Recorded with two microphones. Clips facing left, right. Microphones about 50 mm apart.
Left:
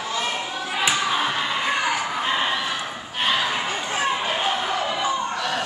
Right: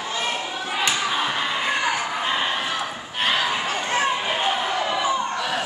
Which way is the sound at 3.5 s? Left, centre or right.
Centre.